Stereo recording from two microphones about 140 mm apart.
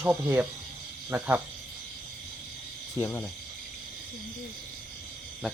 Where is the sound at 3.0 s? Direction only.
15° left (ahead or behind).